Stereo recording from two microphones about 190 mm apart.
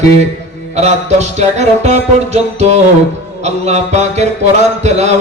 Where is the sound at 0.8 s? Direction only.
35° right (ahead or behind).